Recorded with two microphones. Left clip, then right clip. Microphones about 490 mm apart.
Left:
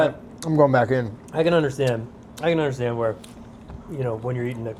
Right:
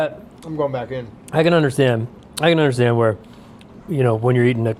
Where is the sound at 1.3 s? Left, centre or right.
Right.